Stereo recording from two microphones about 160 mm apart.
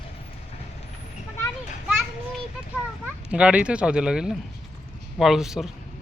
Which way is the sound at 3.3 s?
5° right (ahead or behind).